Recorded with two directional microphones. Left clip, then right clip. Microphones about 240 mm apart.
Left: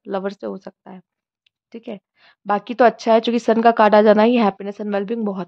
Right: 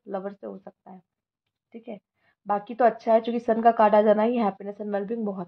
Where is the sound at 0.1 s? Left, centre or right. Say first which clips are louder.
Left 8 dB; left.